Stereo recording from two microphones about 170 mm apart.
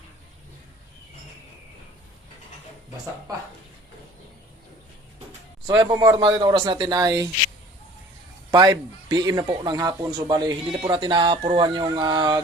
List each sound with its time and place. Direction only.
5.6 s speech: 25° right (ahead or behind)
8.4 s speech: 20° right (ahead or behind)